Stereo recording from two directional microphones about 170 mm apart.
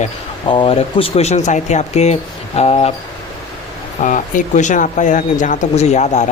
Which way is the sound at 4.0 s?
50° left (ahead or behind).